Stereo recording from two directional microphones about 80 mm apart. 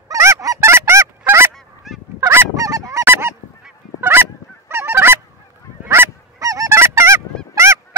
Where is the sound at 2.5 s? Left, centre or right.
Right.